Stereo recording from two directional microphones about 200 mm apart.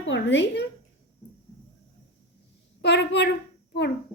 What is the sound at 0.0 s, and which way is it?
Speech, 65° left (ahead or behind).